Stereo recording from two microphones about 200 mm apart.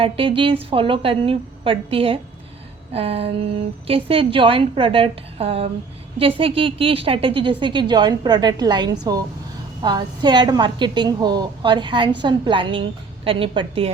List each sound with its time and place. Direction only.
0.0 s a woman's voice: 25° right (ahead or behind)